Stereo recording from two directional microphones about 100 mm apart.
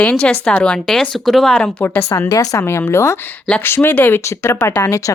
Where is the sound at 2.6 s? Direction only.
25° left (ahead or behind).